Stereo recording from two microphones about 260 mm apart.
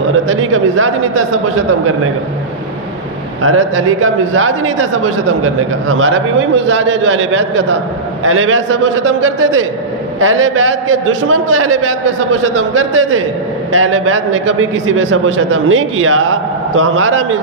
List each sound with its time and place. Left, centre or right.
0.3 s a man's voice: right
3.4 s a man's voice: right